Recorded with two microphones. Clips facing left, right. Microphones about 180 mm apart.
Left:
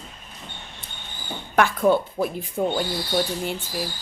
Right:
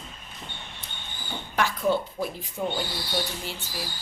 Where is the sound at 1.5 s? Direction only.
55° left (ahead or behind).